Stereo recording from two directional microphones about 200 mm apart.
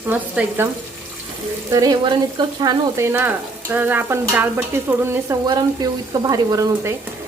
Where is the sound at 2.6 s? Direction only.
15° right (ahead or behind).